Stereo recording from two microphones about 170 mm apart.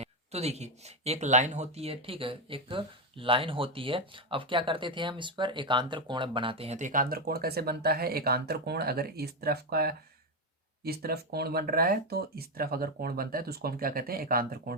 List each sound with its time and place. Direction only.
0.0 s speech: 40° right (ahead or behind); by 14.8 s 60° right (ahead or behind)